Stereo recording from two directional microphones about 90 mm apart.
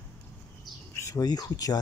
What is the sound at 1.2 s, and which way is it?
Speech, 45° left (ahead or behind).